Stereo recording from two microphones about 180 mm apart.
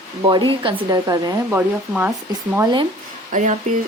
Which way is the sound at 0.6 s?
20° right (ahead or behind).